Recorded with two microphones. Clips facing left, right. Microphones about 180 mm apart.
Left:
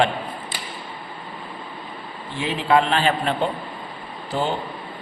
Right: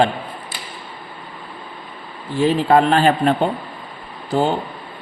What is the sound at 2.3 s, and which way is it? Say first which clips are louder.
Speech: right 5 dB; 40° right (ahead or behind).